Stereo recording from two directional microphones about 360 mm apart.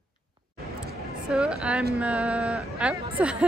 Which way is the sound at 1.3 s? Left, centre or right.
Centre.